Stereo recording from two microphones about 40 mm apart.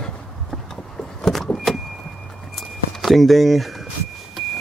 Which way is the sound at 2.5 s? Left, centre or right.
Centre.